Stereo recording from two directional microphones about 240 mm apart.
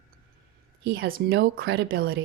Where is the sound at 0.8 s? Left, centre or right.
Right.